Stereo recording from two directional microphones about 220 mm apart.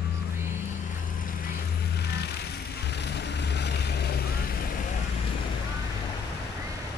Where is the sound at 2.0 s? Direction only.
45° left (ahead or behind).